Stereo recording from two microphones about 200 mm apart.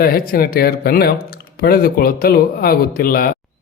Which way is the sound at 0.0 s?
50° left (ahead or behind).